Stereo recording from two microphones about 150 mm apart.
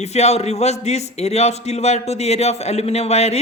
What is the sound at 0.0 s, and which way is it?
A man's voice, 45° left (ahead or behind).